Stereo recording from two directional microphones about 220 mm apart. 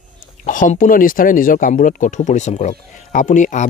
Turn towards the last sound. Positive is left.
turn(degrees=35)  # may be behind; listen again after turning